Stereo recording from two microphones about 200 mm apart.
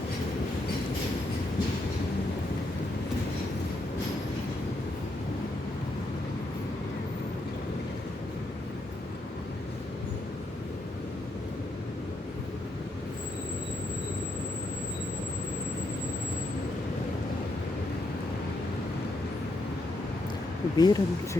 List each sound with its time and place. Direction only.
20.7 s speech: 20° left (ahead or behind)